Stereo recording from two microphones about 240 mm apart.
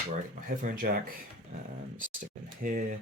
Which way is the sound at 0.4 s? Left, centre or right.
Right.